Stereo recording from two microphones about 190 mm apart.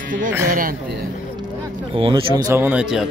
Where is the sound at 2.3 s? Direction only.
15° right (ahead or behind).